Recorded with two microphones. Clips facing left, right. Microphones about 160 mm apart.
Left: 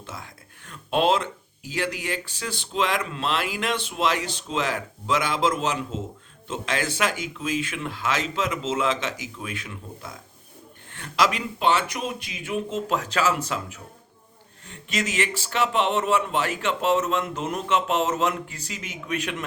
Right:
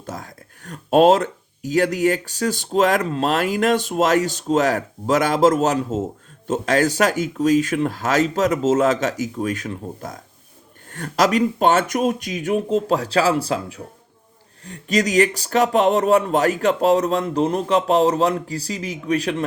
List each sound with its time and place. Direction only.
0.0 s speech: 40° right (ahead or behind)